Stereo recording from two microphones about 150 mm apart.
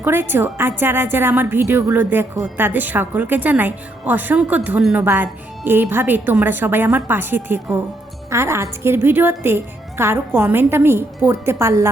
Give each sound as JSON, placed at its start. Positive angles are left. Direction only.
{"t": 0.0, "sound": "a woman's voice", "side_deg": -15}